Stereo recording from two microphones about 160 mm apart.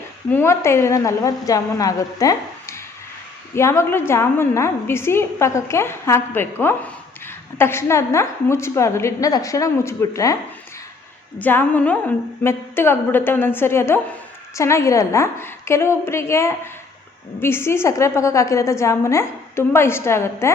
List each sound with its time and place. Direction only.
0.3 s a woman's voice: 15° left (ahead or behind)
11.3 s a woman's voice: 10° left (ahead or behind)